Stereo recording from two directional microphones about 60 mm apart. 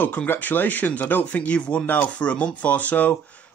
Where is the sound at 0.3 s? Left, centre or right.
Left.